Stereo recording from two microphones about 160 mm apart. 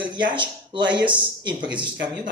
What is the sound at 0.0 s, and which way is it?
Speech, 30° right (ahead or behind).